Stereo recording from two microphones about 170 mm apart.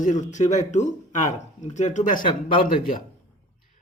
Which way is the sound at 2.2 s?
30° left (ahead or behind).